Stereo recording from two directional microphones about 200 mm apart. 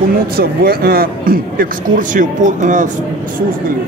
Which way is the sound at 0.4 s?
50° right (ahead or behind).